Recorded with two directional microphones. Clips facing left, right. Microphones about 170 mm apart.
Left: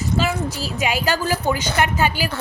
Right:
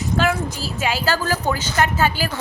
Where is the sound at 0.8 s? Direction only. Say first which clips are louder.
Even; 15° left (ahead or behind).